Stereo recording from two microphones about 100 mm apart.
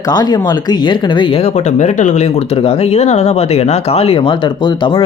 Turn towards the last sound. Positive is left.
turn(degrees=55)  # may be behind; listen again after turning